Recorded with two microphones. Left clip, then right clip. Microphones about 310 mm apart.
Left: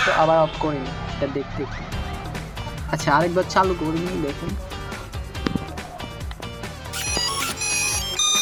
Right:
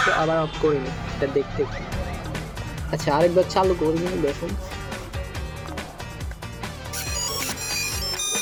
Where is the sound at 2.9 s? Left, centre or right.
Left.